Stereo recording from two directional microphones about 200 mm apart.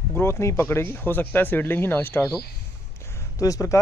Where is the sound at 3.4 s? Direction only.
15° left (ahead or behind).